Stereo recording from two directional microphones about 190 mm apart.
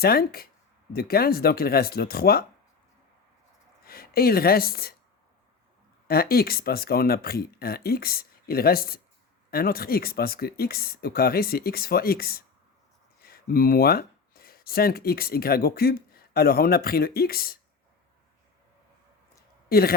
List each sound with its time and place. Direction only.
0.0 s speech: 55° left (ahead or behind)
3.8 s speech: 50° left (ahead or behind)
6.1 s speech: 55° left (ahead or behind)
19.6 s speech: 50° left (ahead or behind)